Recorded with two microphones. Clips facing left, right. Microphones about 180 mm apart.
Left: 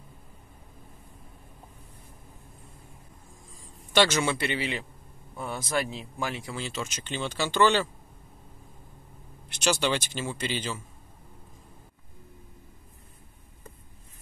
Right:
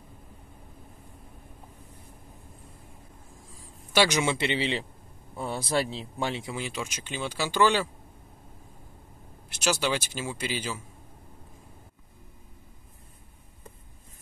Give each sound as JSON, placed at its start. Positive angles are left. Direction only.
{"t": 3.9, "sound": "a man's voice", "side_deg": -10}
{"t": 4.2, "sound": "speech", "side_deg": -20}
{"t": 9.5, "sound": "speech", "side_deg": -5}